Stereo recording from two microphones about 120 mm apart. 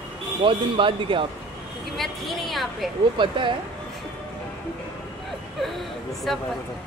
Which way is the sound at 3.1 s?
45° right (ahead or behind).